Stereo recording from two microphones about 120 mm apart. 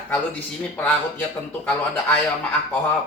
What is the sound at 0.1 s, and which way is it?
Speech, 15° left (ahead or behind).